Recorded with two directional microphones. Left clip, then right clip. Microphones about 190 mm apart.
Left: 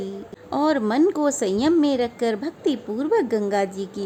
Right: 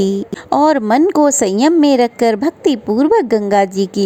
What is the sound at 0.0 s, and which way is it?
Speech, 45° right (ahead or behind).